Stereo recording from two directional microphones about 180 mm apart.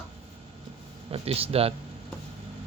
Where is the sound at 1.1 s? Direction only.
35° right (ahead or behind).